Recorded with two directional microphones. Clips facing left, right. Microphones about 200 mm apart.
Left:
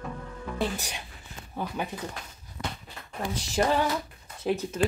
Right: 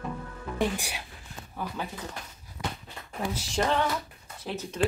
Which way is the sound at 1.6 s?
25° left (ahead or behind).